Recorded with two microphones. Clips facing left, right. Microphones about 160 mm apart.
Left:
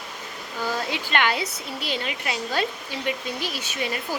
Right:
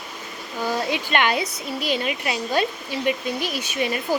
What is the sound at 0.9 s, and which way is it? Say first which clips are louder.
A woman's voice: right 2 dB; 20° right (ahead or behind).